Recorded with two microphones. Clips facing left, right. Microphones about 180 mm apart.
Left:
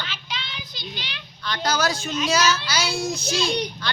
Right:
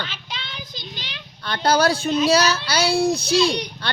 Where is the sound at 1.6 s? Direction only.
30° right (ahead or behind).